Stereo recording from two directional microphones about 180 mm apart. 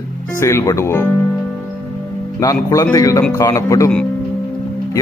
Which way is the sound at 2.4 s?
20° left (ahead or behind).